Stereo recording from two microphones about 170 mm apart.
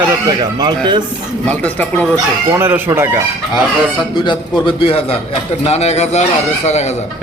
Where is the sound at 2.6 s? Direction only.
15° right (ahead or behind).